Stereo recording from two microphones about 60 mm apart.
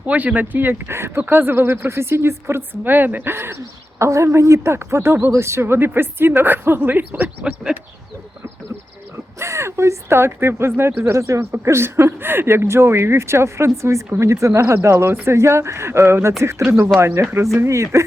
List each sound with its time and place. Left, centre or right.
0.0 s a woman's voice: right
9.4 s speech: right